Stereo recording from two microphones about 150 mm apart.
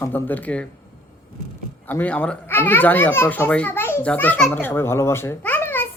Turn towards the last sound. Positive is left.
turn(degrees=15)  # may be behind; listen again after turning